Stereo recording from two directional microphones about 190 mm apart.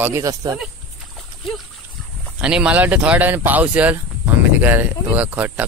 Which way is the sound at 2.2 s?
5° right (ahead or behind).